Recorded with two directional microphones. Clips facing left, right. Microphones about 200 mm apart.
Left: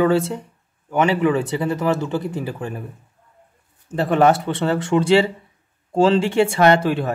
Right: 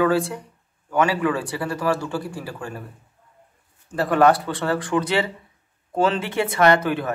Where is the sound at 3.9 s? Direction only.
25° left (ahead or behind).